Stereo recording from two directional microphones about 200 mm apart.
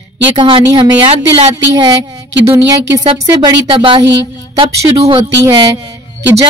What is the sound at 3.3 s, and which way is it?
Speech, 20° right (ahead or behind).